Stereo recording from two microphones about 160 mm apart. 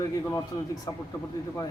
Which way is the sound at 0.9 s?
20° left (ahead or behind).